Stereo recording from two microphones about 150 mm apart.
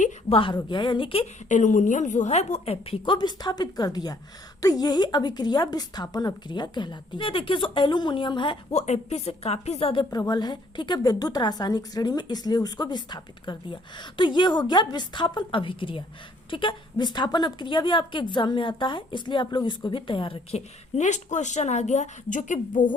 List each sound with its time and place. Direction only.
0.3 s a woman's voice: 35° left (ahead or behind)
1.5 s a woman's voice: 55° left (ahead or behind); by 8.5 s 35° left (ahead or behind)
8.7 s a woman's voice: 45° left (ahead or behind)